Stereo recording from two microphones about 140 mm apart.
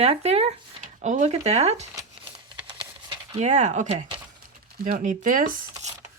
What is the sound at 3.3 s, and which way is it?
Speech, 55° right (ahead or behind).